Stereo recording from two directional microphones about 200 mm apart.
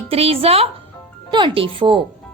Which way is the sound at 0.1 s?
30° right (ahead or behind).